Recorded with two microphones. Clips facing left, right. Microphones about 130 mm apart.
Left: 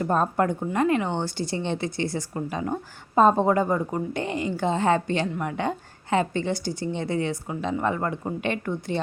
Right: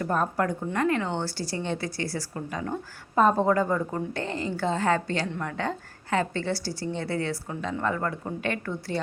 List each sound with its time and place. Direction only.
0.0 s a woman's voice: 25° left (ahead or behind)